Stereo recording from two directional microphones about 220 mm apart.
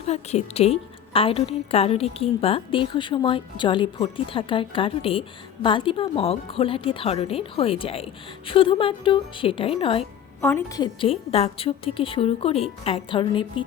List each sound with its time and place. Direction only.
0.1 s a woman's voice: 30° left (ahead or behind)
10.4 s a woman's voice: 15° left (ahead or behind)